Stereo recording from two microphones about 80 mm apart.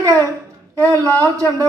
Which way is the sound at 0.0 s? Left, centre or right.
Right.